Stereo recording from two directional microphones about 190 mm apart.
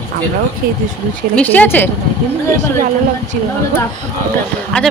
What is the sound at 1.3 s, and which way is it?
Speech, 10° left (ahead or behind).